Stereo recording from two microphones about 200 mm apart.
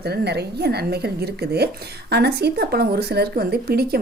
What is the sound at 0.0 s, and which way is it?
A woman's voice, 55° right (ahead or behind).